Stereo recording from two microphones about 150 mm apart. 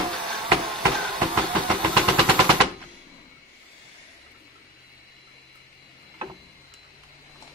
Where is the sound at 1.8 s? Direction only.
35° right (ahead or behind).